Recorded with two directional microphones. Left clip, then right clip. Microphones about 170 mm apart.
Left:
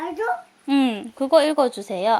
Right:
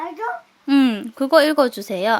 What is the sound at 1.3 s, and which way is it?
Speech, 90° right.